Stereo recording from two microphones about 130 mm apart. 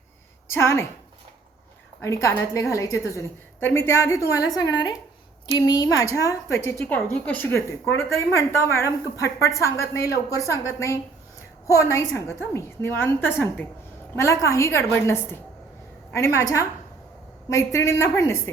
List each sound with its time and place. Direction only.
0.4 s a woman's voice: 20° left (ahead or behind)
2.5 s a woman's voice: 25° left (ahead or behind)
6.8 s a woman's voice: 10° left (ahead or behind)